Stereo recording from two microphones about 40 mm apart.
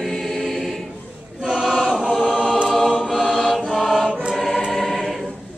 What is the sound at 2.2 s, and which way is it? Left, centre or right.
Choir, centre.